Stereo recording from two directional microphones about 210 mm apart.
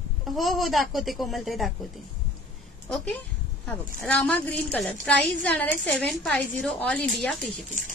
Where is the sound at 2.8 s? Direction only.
5° left (ahead or behind).